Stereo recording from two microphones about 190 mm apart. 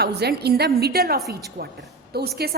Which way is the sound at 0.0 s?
60° right (ahead or behind).